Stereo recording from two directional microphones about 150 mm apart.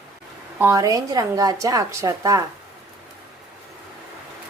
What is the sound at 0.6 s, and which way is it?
A woman's voice, 20° right (ahead or behind).